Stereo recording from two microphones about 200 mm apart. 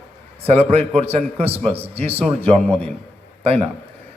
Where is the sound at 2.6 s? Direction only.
5° left (ahead or behind).